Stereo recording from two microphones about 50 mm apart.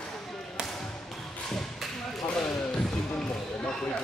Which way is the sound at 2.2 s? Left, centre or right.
Centre.